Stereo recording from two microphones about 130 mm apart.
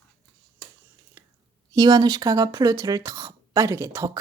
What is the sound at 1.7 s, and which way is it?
Speech, 30° right (ahead or behind).